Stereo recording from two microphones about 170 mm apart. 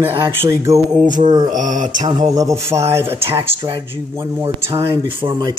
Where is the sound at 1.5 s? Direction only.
50° right (ahead or behind).